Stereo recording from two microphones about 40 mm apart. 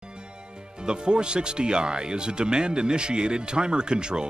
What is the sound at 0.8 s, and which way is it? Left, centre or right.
Speech, right.